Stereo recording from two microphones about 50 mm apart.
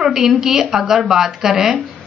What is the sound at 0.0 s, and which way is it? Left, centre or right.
A woman's voice, centre.